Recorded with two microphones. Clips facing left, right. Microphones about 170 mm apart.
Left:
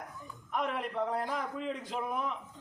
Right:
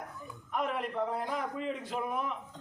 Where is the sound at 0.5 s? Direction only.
Centre (ahead or behind).